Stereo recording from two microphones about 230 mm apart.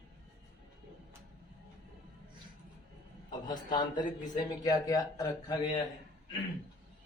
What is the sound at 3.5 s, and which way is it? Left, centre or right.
Speech, centre.